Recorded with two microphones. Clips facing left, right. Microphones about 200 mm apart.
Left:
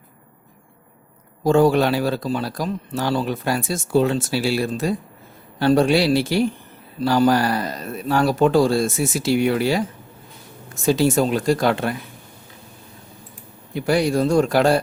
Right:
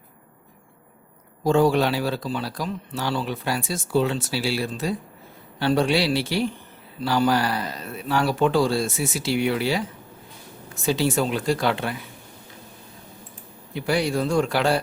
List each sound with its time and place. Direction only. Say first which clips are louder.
1.5 s speech: left 3 dB; 45° left (ahead or behind)
13.7 s speech: left 4 dB; 45° left (ahead or behind)